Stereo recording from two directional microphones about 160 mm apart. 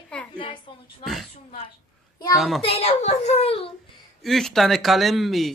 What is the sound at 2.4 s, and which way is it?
Speech, centre (ahead or behind).